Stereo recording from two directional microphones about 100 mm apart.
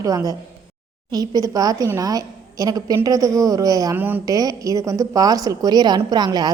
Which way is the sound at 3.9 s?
20° right (ahead or behind).